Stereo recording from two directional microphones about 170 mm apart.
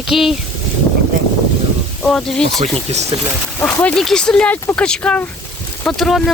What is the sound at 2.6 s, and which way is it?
Speech, 40° right (ahead or behind).